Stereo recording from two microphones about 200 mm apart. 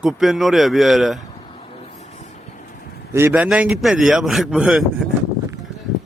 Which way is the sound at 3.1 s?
10° right (ahead or behind).